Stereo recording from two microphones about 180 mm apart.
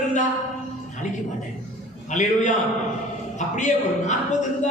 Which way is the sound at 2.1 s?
45° left (ahead or behind).